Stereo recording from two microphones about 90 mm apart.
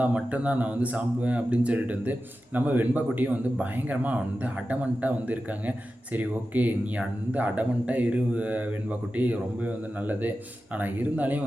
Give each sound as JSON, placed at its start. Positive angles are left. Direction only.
{"t": 0.0, "sound": "speech", "side_deg": -15}